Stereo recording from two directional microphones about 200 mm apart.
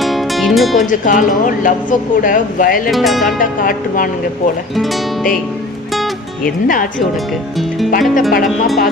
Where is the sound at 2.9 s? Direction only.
Centre (ahead or behind).